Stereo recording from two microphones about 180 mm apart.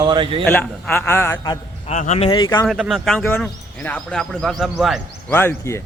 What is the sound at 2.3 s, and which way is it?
Speech, 25° left (ahead or behind).